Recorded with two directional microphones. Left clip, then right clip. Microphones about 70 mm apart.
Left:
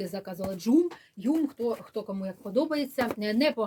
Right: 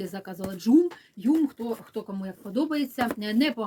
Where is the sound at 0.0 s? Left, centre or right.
Centre.